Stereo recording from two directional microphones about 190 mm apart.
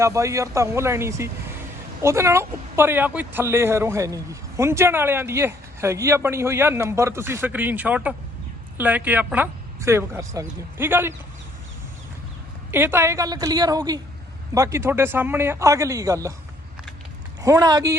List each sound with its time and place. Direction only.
0.0 s a man's voice: 15° right (ahead or behind)
12.7 s a woman's voice: 10° right (ahead or behind)
17.4 s a man's voice: 20° right (ahead or behind)